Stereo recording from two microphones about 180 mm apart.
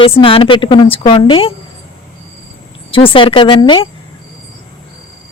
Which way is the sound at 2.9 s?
30° left (ahead or behind).